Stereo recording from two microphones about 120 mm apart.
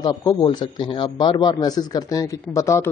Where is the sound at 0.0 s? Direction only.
35° left (ahead or behind).